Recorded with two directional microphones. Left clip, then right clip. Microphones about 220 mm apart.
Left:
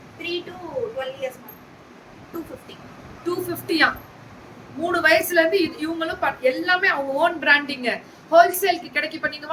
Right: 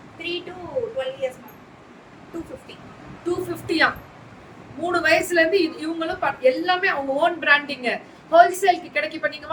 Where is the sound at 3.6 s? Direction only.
15° left (ahead or behind).